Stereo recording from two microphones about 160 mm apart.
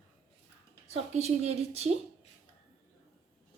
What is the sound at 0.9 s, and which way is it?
A woman's voice, 40° right (ahead or behind).